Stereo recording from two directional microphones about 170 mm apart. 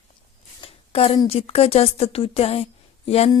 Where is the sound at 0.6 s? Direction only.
35° left (ahead or behind).